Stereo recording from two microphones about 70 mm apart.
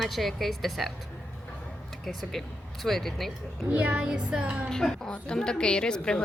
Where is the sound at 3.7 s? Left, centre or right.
Centre.